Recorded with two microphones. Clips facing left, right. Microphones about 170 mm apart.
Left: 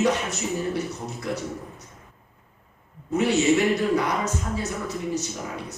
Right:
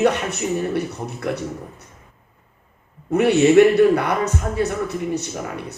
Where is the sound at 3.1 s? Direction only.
60° right (ahead or behind).